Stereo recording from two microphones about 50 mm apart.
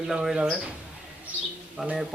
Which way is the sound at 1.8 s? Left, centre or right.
Centre.